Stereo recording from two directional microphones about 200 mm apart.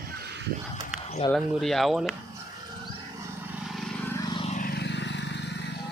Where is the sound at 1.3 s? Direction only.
Centre (ahead or behind).